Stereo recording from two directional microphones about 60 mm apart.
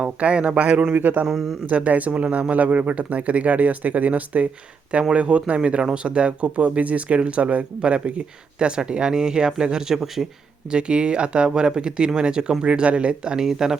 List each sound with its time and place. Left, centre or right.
0.0 s speech: centre
0.9 s speech: right
1.3 s speech: centre
1.7 s speech: right; by 13.7 s centre